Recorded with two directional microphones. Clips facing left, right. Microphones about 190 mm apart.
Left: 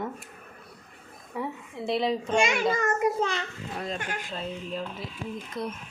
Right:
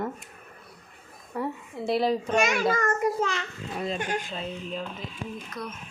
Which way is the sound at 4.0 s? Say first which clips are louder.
Right 5 dB; 20° right (ahead or behind).